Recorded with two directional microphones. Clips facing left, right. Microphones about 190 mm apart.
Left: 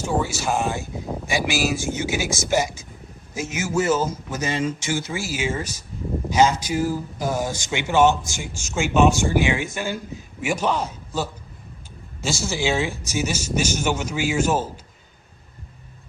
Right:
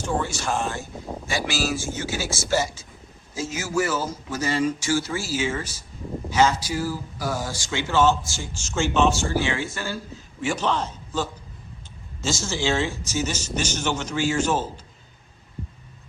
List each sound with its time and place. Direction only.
0.0 s a man's voice: 5° left (ahead or behind)